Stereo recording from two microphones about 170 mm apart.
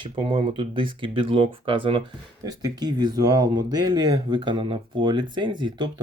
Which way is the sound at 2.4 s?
20° right (ahead or behind).